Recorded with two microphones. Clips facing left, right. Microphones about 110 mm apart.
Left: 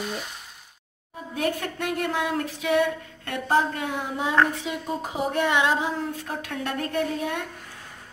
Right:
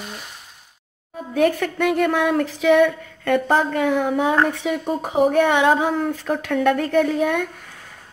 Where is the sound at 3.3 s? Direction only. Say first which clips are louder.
Right 5 dB; 70° right (ahead or behind).